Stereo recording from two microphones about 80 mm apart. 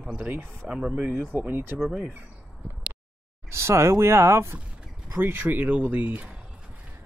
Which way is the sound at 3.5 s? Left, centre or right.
Right.